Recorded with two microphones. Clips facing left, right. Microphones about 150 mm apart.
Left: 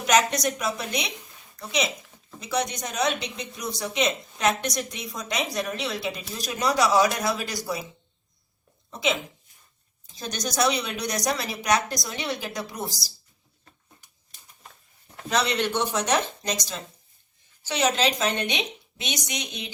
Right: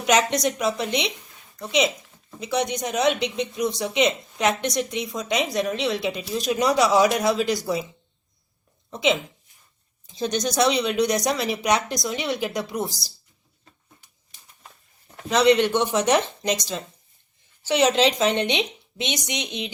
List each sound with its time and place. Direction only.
0.1 s speech: 25° right (ahead or behind)
8.9 s speech: 25° right (ahead or behind)
15.1 s speech: 20° right (ahead or behind)
17.7 s speech: 20° right (ahead or behind)